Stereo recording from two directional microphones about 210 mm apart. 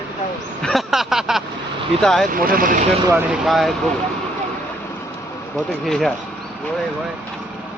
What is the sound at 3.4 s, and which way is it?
Speech, centre (ahead or behind).